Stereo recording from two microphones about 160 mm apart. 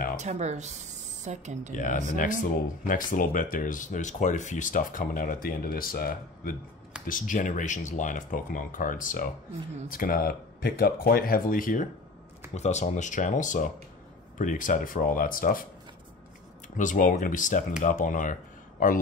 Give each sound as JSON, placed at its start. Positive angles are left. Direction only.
{"t": 0.2, "sound": "speech", "side_deg": -45}
{"t": 1.8, "sound": "speech", "side_deg": 50}
{"t": 12.5, "sound": "speech", "side_deg": 45}
{"t": 16.7, "sound": "speech", "side_deg": 55}